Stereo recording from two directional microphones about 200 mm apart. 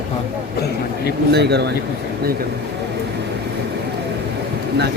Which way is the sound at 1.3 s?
55° right (ahead or behind).